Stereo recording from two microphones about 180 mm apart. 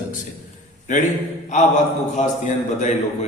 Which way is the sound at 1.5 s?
40° left (ahead or behind).